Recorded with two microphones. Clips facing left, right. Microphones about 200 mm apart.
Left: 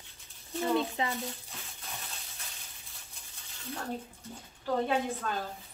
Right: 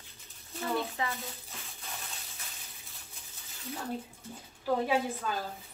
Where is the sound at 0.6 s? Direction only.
20° left (ahead or behind).